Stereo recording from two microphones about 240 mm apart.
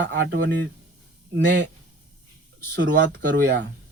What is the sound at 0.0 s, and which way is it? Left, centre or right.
Speech, right.